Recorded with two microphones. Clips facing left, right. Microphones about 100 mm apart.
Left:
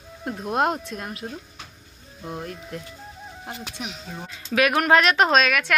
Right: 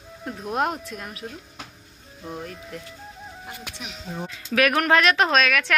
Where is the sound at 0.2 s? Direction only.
30° left (ahead or behind).